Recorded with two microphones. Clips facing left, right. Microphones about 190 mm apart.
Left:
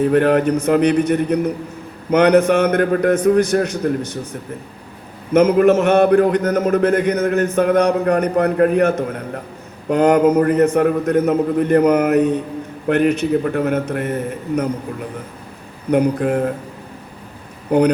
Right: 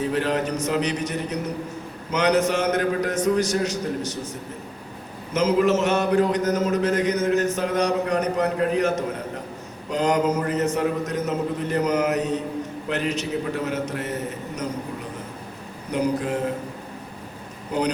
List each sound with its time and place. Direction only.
0.0 s a man's voice: 55° left (ahead or behind)
15.9 s a man's voice: 55° left (ahead or behind)
17.7 s speech: 55° left (ahead or behind)